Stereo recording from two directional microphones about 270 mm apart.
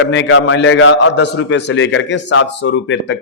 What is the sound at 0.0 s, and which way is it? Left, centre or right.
A man's voice, left.